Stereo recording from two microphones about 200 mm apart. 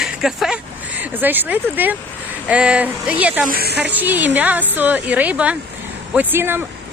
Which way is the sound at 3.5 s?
50° right (ahead or behind).